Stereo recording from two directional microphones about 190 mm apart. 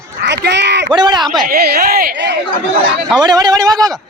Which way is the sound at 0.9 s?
20° right (ahead or behind).